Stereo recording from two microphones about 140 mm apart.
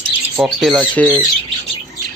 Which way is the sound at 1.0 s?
10° left (ahead or behind).